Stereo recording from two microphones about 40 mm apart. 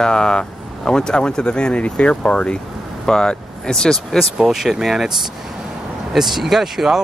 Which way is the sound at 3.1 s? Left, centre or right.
Centre.